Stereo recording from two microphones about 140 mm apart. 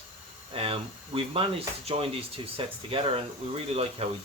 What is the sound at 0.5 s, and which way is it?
Speech, 40° right (ahead or behind).